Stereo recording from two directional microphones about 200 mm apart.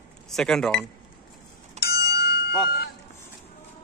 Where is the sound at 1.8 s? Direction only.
50° left (ahead or behind).